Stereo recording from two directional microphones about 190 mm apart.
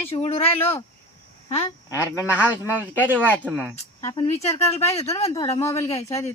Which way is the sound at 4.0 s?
30° left (ahead or behind).